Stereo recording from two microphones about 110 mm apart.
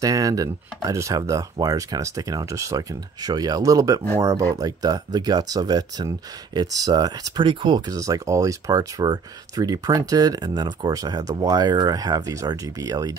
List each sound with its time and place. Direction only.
0.0 s chopping: 30° right (ahead or behind)
0.8 s speech: 30° right (ahead or behind)